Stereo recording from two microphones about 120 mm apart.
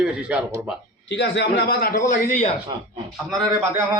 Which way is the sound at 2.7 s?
35° right (ahead or behind).